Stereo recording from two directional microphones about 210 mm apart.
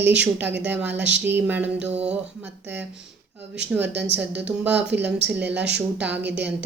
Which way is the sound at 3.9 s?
55° right (ahead or behind).